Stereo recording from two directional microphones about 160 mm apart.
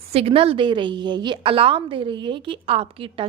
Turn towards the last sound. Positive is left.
turn(degrees=-35)  # may be behind; listen again after turning